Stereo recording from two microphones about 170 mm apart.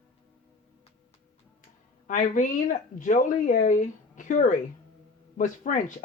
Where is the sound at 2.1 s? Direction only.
50° left (ahead or behind).